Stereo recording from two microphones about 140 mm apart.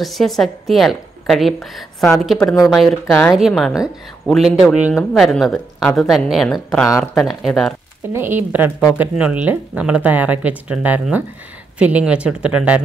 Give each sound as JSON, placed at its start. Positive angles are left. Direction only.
{"t": 0.0, "sound": "a woman's voice", "side_deg": 0}
{"t": 8.1, "sound": "speech", "side_deg": -15}